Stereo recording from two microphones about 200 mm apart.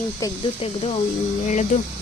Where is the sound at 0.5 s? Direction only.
30° left (ahead or behind).